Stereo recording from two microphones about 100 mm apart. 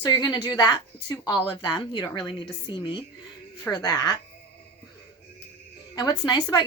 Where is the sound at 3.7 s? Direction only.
40° left (ahead or behind).